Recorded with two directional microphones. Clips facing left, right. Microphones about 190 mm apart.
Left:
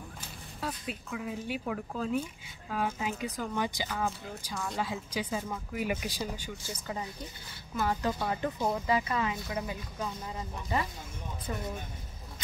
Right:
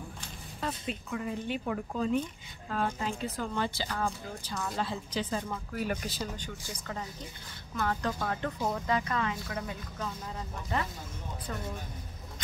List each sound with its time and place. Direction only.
0.2 s speech: 5° left (ahead or behind)
4.6 s a woman's voice: centre (ahead or behind)
4.8 s speech: 10° left (ahead or behind)